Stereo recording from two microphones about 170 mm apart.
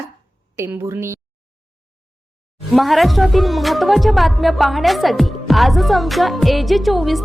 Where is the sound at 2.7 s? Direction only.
Centre (ahead or behind).